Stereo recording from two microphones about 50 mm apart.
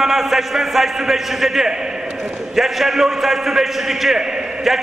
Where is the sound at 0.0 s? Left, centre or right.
Centre.